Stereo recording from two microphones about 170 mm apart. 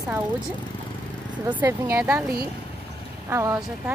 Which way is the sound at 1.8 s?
15° right (ahead or behind).